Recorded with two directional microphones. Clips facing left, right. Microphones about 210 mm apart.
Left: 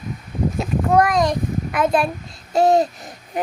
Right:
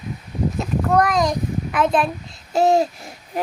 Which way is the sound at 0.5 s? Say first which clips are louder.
Left 2 dB; 5° left (ahead or behind).